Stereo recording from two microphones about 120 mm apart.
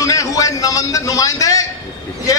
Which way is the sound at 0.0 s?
30° left (ahead or behind).